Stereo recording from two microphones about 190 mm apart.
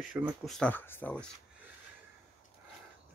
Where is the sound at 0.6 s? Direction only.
10° left (ahead or behind).